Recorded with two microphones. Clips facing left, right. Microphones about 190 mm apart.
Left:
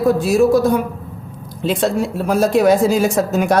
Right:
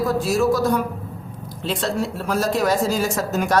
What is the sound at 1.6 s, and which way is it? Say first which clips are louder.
A woman's voice: left 6 dB; 55° left (ahead or behind).